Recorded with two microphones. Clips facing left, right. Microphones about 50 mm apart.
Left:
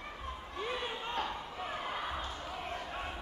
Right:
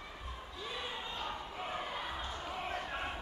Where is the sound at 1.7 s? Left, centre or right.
Left.